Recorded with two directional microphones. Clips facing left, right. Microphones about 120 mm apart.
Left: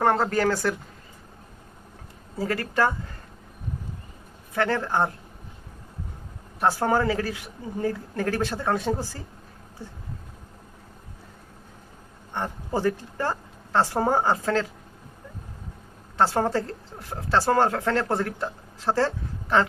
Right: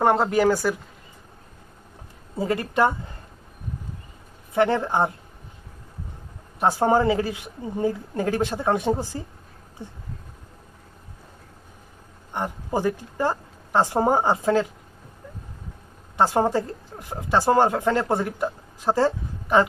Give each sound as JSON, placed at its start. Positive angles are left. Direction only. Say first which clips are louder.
{"t": 0.0, "sound": "speech", "louder": "right 3 dB", "side_deg": -20}
{"t": 2.4, "sound": "a woman's voice", "louder": "right 3 dB", "side_deg": -20}
{"t": 4.5, "sound": "a woman's voice", "louder": "right 3 dB", "side_deg": -20}
{"t": 6.6, "sound": "a woman's voice", "louder": "right 3 dB", "side_deg": -20}
{"t": 12.3, "sound": "speech", "louder": "right 2 dB", "side_deg": -15}
{"t": 16.1, "sound": "speech", "louder": "right 2 dB", "side_deg": -15}